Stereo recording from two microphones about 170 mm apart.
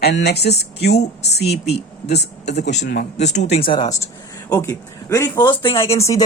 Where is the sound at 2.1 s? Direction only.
80° left.